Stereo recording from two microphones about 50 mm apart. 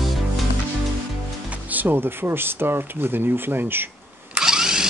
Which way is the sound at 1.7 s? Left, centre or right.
Right.